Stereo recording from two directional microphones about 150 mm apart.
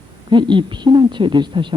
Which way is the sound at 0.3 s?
30° right (ahead or behind).